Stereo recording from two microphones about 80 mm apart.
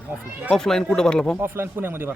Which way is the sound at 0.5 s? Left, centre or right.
Centre.